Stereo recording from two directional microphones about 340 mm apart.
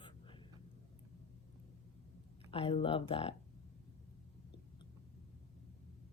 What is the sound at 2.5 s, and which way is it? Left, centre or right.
Speech, centre.